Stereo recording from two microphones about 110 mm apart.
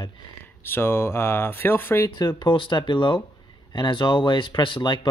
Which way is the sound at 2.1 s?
45° left (ahead or behind).